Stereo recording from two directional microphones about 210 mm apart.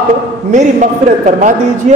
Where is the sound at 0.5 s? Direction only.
35° right (ahead or behind).